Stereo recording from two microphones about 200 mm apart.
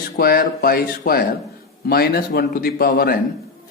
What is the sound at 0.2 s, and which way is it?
A man's voice, 50° left (ahead or behind).